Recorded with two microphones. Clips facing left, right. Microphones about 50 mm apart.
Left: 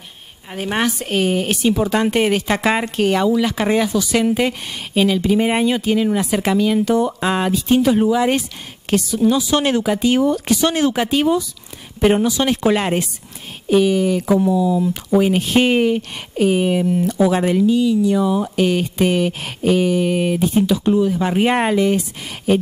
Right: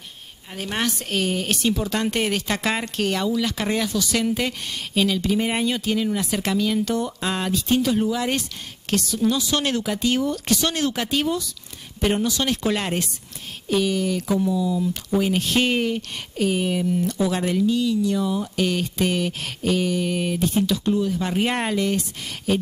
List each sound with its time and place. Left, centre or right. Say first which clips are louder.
0.5 s speech: left 6 dB; centre